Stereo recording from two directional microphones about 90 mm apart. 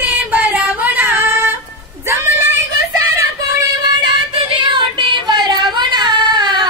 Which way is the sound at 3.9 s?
60° right (ahead or behind).